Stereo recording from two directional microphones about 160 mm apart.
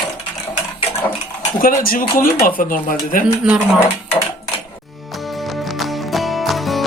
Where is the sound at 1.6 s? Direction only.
60° left (ahead or behind).